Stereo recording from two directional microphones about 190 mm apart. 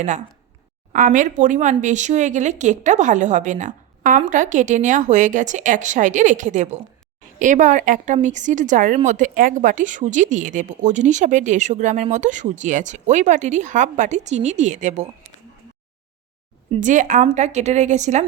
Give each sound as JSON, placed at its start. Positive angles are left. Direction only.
{"t": 0.9, "sound": "a woman's voice", "side_deg": -45}
{"t": 16.8, "sound": "a woman's voice", "side_deg": -40}